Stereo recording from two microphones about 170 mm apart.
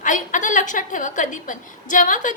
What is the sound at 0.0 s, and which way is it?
A woman's voice, 50° left (ahead or behind).